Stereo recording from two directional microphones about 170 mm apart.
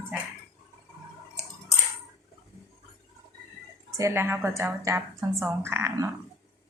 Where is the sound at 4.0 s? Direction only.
15° right (ahead or behind).